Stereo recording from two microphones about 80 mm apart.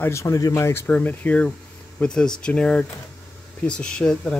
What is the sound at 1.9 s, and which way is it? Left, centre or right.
Speech, centre.